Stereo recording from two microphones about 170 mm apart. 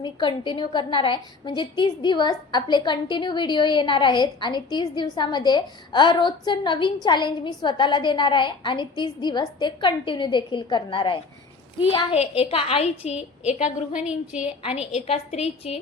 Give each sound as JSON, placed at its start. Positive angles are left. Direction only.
{"t": 0.0, "sound": "a woman's voice", "side_deg": 25}
{"t": 13.9, "sound": "a woman's voice", "side_deg": -5}
{"t": 14.6, "sound": "a woman's voice", "side_deg": 40}